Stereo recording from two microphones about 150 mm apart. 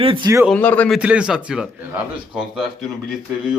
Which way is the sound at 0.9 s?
5° right (ahead or behind).